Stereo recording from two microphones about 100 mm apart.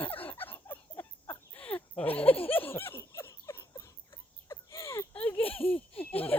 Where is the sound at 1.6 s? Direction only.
15° left (ahead or behind).